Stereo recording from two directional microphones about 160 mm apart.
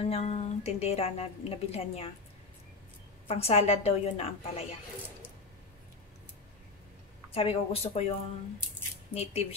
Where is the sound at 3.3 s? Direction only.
40° left (ahead or behind).